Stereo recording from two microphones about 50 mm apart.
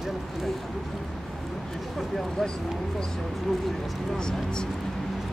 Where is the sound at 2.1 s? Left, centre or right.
Centre.